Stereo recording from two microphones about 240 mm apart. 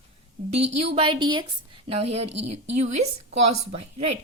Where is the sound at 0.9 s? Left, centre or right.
Right.